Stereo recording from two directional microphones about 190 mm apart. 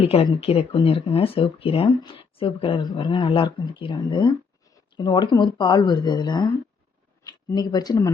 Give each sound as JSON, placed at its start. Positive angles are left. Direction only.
{"t": 0.0, "sound": "speech", "side_deg": 30}